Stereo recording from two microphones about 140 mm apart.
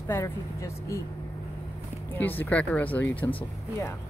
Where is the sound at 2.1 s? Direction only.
15° left (ahead or behind).